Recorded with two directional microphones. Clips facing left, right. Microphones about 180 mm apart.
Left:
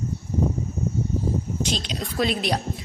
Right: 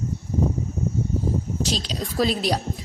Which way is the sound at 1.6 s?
40° right (ahead or behind).